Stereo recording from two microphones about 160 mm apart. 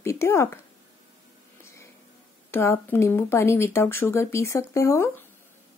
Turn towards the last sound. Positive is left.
turn(degrees=15)  # may be behind; listen again after turning